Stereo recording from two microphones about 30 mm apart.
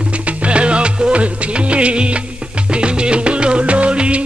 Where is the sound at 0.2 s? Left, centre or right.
Right.